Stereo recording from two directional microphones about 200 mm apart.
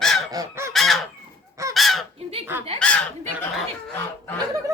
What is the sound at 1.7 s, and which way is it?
Honk, centre (ahead or behind).